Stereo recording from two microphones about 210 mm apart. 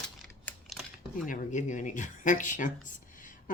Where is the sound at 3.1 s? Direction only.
40° left (ahead or behind).